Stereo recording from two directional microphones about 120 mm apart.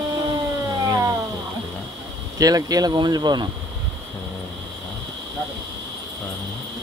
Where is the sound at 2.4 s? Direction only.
30° right (ahead or behind).